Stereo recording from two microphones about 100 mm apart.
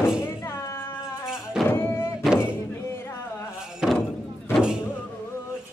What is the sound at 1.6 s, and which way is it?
Music, 20° left (ahead or behind).